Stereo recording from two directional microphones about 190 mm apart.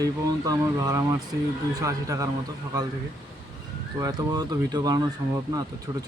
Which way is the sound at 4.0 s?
20° right (ahead or behind).